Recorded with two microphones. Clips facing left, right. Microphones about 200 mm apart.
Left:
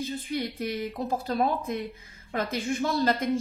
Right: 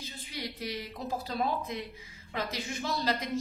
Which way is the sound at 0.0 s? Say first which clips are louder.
Left 10 dB; 50° left (ahead or behind).